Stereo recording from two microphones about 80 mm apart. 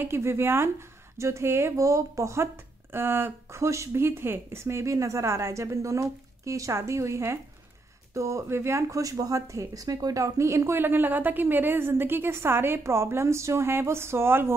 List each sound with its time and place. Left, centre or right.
0.0 s speech: right